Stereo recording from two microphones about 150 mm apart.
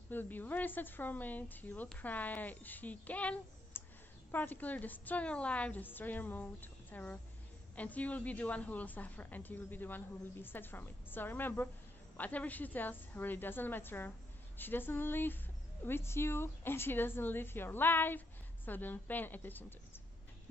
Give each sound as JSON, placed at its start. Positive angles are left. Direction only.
{"t": 0.1, "sound": "a woman's voice", "side_deg": 10}